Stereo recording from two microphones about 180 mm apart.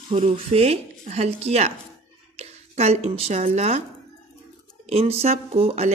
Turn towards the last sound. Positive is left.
turn(degrees=-35)  # may be behind; listen again after turning